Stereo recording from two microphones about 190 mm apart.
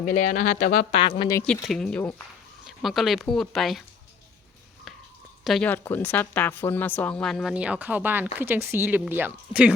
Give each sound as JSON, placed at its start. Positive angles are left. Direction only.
{"t": 0.0, "sound": "speech", "side_deg": 45}
{"t": 1.4, "sound": "speech", "side_deg": 10}
{"t": 1.6, "sound": "a woman's voice", "side_deg": 0}
{"t": 5.5, "sound": "a woman's voice", "side_deg": 5}